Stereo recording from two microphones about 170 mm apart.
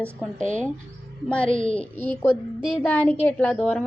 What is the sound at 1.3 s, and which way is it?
Speech, 5° left (ahead or behind).